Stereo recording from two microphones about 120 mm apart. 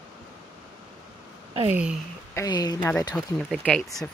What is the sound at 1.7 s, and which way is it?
Speech, 10° right (ahead or behind).